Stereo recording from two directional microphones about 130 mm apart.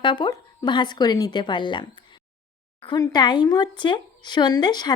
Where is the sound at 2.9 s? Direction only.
30° left (ahead or behind).